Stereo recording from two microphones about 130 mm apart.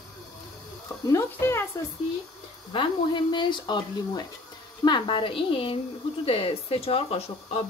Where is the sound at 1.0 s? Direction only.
20° left (ahead or behind).